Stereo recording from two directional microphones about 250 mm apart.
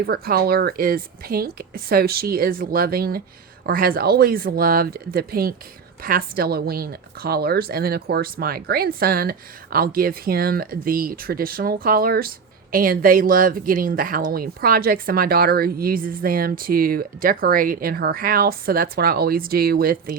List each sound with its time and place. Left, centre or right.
0.0 s speech: right